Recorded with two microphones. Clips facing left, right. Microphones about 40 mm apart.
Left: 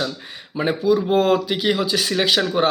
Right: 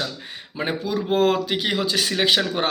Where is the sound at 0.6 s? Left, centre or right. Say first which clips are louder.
Left 8 dB; right.